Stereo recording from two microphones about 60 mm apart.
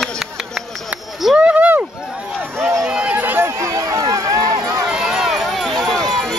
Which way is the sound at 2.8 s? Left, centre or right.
Centre.